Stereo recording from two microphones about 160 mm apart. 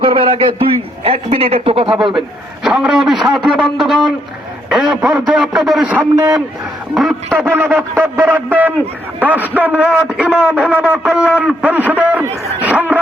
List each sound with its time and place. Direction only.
0.0 s a man's voice: 30° right (ahead or behind)
2.6 s a man's voice: 5° right (ahead or behind)
7.5 s a man's voice: 10° right (ahead or behind)